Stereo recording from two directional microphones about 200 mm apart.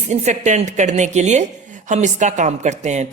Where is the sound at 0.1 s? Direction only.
35° right (ahead or behind).